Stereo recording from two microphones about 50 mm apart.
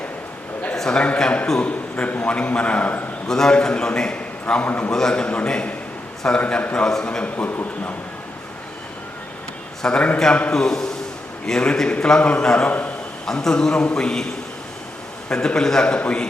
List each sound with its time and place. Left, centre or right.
0.8 s a man's voice: centre
3.2 s a man's voice: centre
4.9 s a man's voice: centre
5.2 s a man's voice: left
7.5 s speech: left
9.8 s a man's voice: centre
12.6 s a man's voice: left
13.2 s a man's voice: centre
15.3 s a man's voice: centre